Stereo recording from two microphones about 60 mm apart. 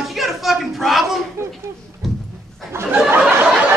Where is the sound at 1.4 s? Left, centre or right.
Right.